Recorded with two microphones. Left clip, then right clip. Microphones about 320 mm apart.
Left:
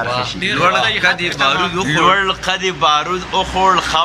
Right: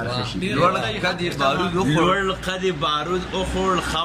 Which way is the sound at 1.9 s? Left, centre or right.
Centre.